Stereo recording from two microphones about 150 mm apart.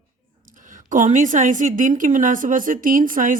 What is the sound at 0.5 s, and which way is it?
A woman's voice, 60° right (ahead or behind).